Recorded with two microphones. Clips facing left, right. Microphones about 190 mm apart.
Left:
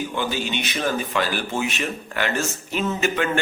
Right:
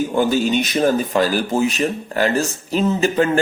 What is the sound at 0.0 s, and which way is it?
Speech, 40° right (ahead or behind).